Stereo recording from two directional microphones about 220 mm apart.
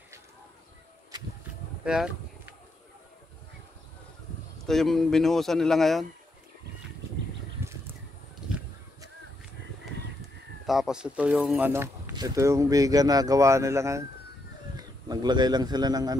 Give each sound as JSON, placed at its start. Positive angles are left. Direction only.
{"t": 1.9, "sound": "a sound", "side_deg": -5}
{"t": 4.6, "sound": "speech", "side_deg": 0}
{"t": 10.7, "sound": "speech", "side_deg": 0}